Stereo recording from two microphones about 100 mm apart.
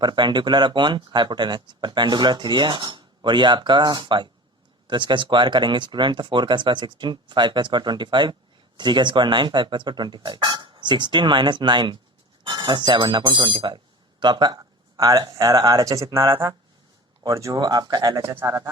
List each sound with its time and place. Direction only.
0.0 s speech: 50° right (ahead or behind)
14.9 s speech: 35° right (ahead or behind)
18.2 s speech: 25° right (ahead or behind)